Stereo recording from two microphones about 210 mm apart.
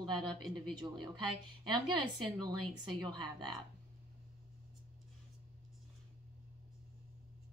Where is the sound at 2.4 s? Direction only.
20° right (ahead or behind).